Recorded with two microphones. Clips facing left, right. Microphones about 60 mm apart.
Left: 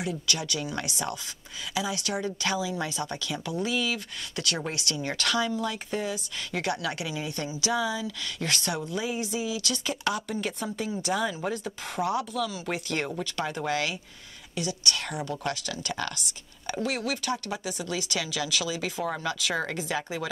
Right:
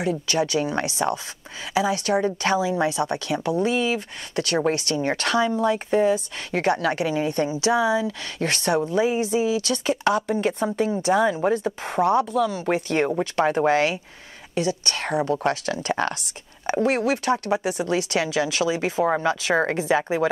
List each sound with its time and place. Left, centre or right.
0.0 s speech: right
7.7 s speech: right